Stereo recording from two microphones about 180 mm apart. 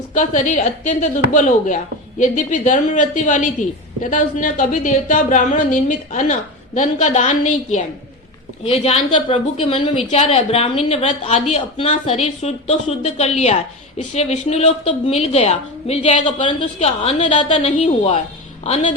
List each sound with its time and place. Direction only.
0.1 s a woman's voice: 45° left (ahead or behind)